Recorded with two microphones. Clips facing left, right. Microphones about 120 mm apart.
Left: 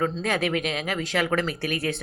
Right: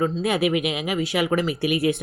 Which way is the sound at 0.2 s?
10° right (ahead or behind).